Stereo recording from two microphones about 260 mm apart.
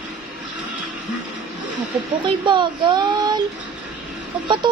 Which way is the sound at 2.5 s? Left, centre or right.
Centre.